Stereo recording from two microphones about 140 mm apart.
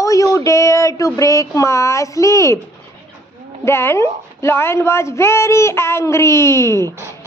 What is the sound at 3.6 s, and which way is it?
A child's voice, 15° left (ahead or behind).